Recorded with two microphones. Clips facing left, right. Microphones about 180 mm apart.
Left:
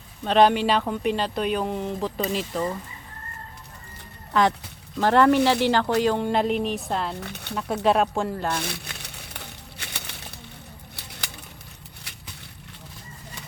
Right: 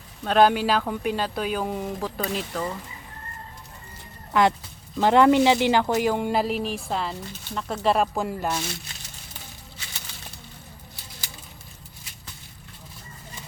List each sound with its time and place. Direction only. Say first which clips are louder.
0.3 s speech: left 1 dB; centre (ahead or behind)
4.3 s speech: right 1 dB; 10° right (ahead or behind)
7.2 s speech: left 2 dB; 65° left (ahead or behind)
7.9 s speech: left 1 dB; centre (ahead or behind)
8.5 s a sound: left 1 dB; 60° left (ahead or behind)